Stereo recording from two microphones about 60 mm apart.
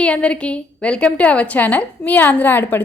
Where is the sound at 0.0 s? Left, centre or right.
Left.